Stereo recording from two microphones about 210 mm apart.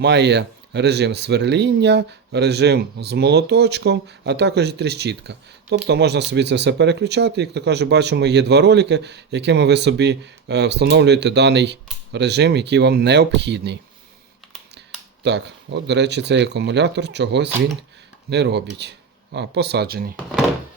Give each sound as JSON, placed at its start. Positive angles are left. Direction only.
{"t": 0.0, "sound": "speech", "side_deg": -55}
{"t": 15.2, "sound": "speech", "side_deg": -55}